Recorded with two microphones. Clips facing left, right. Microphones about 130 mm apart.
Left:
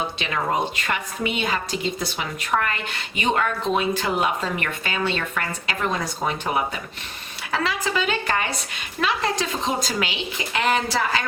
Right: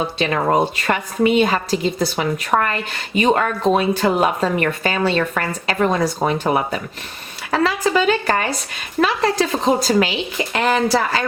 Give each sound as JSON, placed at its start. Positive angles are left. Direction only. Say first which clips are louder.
{"t": 0.5, "sound": "a woman's voice", "louder": "right 6 dB", "side_deg": -40}
{"t": 2.5, "sound": "a woman's voice", "louder": "right 5 dB", "side_deg": -55}
{"t": 3.2, "sound": "a woman's voice", "louder": "right 6 dB", "side_deg": -40}